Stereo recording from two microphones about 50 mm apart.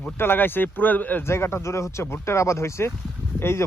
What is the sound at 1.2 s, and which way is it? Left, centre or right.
Speech, left.